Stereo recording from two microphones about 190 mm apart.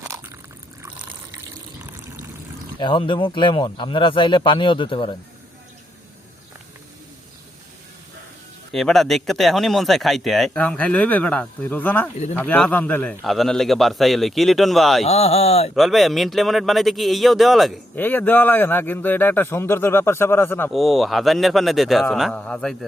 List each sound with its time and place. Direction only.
0.0 s a sound: 15° right (ahead or behind)
1.8 s water: 10° right (ahead or behind)
2.8 s speech: 25° left (ahead or behind)
8.7 s speech: centre (ahead or behind)
15.0 s speech: 30° left (ahead or behind)
15.7 s a man's voice: centre (ahead or behind)
20.7 s speech: centre (ahead or behind)